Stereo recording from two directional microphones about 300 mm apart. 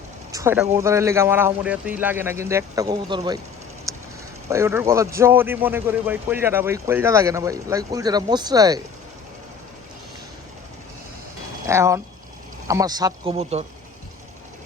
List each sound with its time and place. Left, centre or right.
0.3 s speech: centre
3.9 s a sound: centre
4.4 s speech: centre
11.6 s speech: centre